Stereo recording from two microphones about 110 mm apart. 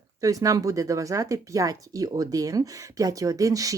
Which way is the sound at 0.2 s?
30° right (ahead or behind).